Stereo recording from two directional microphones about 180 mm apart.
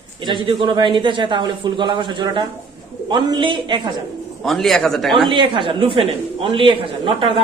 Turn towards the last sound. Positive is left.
turn(degrees=-30)  # may be behind; listen again after turning